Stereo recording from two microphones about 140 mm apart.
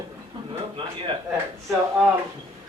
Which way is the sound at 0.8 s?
40° right (ahead or behind).